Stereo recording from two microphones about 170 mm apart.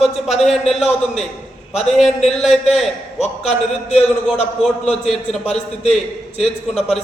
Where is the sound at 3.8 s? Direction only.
40° left (ahead or behind).